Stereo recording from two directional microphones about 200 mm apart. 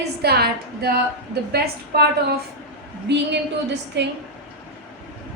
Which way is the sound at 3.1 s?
60° right (ahead or behind).